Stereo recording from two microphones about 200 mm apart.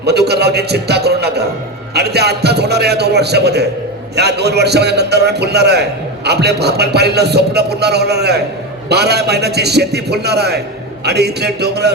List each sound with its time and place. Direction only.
0.0 s a man's voice: 55° right (ahead or behind)